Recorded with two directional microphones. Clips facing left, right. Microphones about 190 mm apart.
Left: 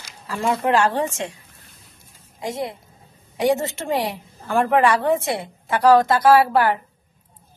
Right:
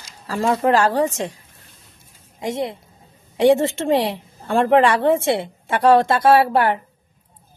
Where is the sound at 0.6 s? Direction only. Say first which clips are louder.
Right 2 dB; 35° right (ahead or behind).